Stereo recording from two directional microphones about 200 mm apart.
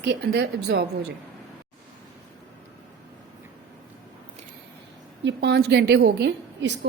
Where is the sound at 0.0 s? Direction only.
55° right (ahead or behind).